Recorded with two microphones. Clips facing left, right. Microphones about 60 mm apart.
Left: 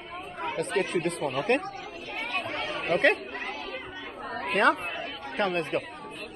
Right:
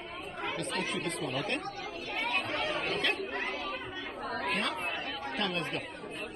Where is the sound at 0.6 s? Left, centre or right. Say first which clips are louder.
Left 9 dB; left.